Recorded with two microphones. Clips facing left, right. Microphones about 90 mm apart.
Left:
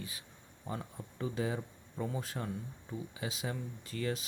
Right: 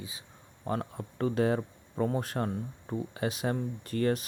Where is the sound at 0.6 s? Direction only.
65° right (ahead or behind).